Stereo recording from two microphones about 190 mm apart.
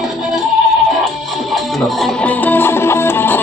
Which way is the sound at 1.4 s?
Centre (ahead or behind).